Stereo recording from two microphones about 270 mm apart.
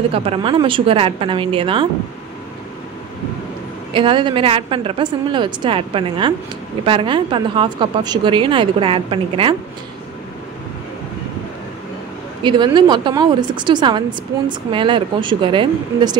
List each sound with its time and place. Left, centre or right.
0.1 s speech: right
3.9 s speech: centre
12.4 s speech: centre